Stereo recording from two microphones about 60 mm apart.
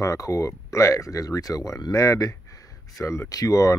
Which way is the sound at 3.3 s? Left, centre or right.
Left.